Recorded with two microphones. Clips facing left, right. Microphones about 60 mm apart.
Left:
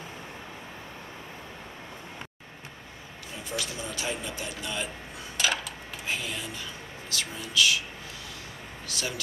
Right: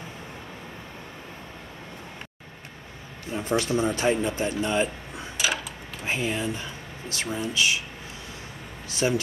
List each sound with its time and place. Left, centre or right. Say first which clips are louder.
3.3 s speech: right 11 dB; right
5.4 s a sound: right 1 dB; centre
6.0 s speech: right 7 dB; right
8.8 s speech: right 10 dB; right